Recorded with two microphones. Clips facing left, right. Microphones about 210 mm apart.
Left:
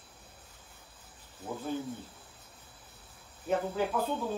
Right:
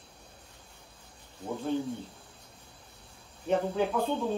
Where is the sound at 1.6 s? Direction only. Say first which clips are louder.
Right 5 dB; 5° left (ahead or behind).